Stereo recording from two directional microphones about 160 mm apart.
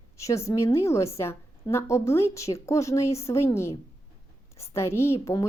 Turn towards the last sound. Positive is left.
turn(degrees=15)  # may be behind; listen again after turning